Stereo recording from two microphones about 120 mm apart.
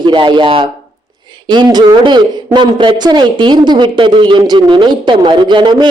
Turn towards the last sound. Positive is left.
turn(degrees=-40)  # may be behind; listen again after turning